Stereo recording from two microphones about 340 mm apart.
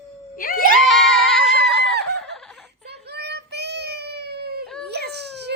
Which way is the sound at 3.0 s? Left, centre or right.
Right.